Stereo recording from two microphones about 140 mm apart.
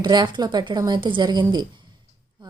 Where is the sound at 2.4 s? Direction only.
30° right (ahead or behind).